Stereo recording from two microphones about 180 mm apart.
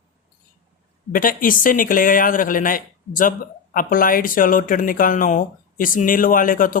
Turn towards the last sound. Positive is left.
turn(degrees=50)  # may be behind; listen again after turning